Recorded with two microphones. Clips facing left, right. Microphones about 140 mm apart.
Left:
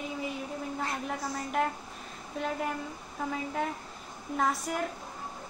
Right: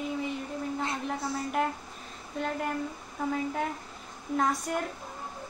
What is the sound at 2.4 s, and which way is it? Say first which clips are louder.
A woman's voice: right 2 dB; centre (ahead or behind).